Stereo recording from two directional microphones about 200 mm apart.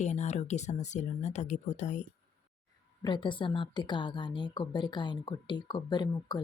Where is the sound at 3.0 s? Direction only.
25° left (ahead or behind).